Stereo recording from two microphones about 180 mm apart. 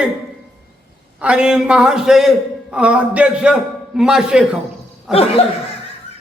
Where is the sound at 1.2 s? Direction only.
5° right (ahead or behind).